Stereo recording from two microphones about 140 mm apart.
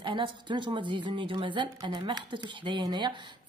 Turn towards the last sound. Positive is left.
turn(degrees=-30)  # may be behind; listen again after turning